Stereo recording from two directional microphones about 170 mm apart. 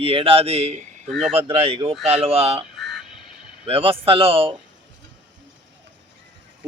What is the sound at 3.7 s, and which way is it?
Speech, 35° right (ahead or behind).